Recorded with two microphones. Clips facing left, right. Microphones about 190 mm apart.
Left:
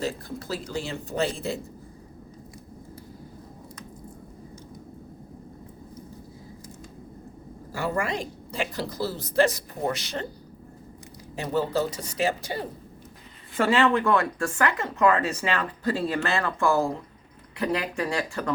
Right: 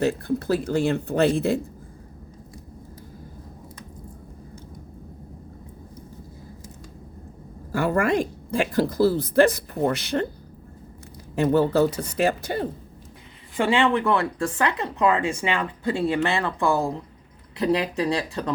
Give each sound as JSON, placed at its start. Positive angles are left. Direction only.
{"t": 0.0, "sound": "a woman's voice", "side_deg": -60}
{"t": 7.7, "sound": "a woman's voice", "side_deg": -55}
{"t": 11.3, "sound": "a woman's voice", "side_deg": -55}
{"t": 13.6, "sound": "speech", "side_deg": -15}